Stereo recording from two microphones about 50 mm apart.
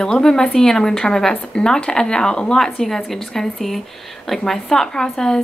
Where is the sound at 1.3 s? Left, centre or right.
Left.